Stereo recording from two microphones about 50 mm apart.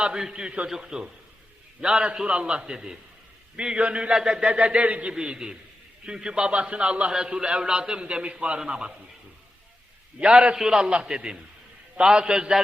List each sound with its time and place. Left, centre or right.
0.0 s a man's voice: centre
4.1 s a man's voice: centre
10.2 s a man's voice: right